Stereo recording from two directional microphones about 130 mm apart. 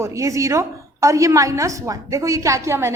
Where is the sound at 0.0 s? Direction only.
25° right (ahead or behind).